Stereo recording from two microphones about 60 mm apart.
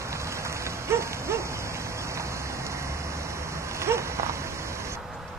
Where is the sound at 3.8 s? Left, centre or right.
Right.